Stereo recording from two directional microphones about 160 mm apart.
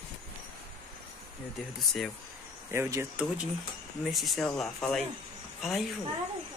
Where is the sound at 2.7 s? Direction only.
15° right (ahead or behind).